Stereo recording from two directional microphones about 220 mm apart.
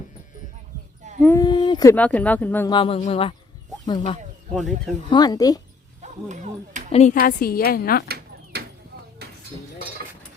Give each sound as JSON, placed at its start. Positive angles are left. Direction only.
{"t": 1.2, "sound": "speech", "side_deg": 15}
{"t": 2.6, "sound": "speech", "side_deg": 25}
{"t": 6.0, "sound": "speech", "side_deg": -35}
{"t": 6.9, "sound": "a woman's voice", "side_deg": 35}
{"t": 8.0, "sound": "a sound", "side_deg": -45}
{"t": 9.2, "sound": "cutlery", "side_deg": -45}